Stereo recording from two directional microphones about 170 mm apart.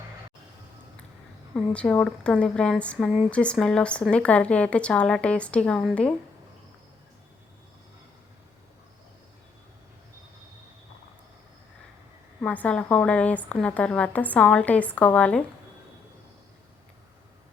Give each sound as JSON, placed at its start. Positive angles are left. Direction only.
{"t": 1.7, "sound": "a woman's voice", "side_deg": 5}
{"t": 12.4, "sound": "a woman's voice", "side_deg": 5}